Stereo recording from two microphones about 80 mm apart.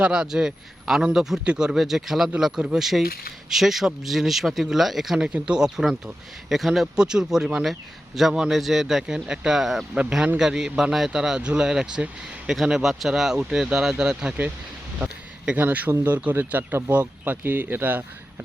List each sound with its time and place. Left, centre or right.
0.0 s a man's voice: centre